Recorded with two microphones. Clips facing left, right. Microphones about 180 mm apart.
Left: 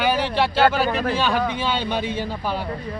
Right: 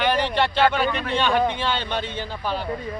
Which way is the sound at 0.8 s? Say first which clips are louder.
Left 4 dB; 40° left (ahead or behind).